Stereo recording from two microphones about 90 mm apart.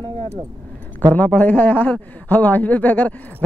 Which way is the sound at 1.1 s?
20° left (ahead or behind).